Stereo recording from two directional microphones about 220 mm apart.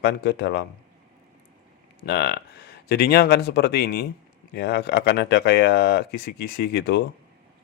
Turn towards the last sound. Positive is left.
turn(degrees=45)  # may be behind; listen again after turning